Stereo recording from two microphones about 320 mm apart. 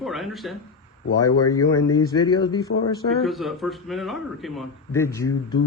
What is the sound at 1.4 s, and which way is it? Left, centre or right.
Speech, centre.